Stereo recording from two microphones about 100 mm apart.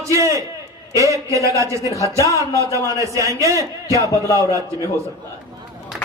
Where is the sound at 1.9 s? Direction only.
30° left (ahead or behind).